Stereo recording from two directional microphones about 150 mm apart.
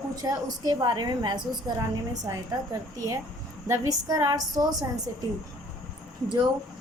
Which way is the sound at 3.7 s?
25° right (ahead or behind).